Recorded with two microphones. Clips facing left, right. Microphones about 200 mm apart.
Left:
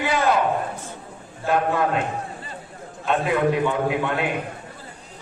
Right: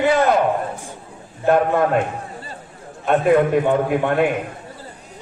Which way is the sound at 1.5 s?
50° right (ahead or behind).